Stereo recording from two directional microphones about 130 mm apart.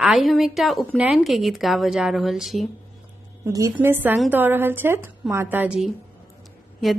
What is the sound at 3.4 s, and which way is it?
A woman's voice, 25° right (ahead or behind).